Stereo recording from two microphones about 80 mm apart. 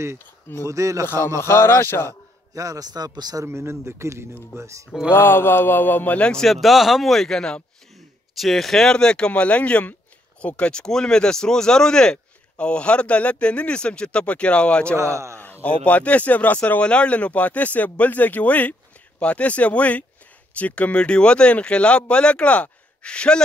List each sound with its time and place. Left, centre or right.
0.2 s speech: left
0.7 s speech: right
1.0 s speech: left
2.5 s a man's voice: right
3.4 s speech: right
5.1 s speech: left
15.0 s speech: right
15.3 s speech: left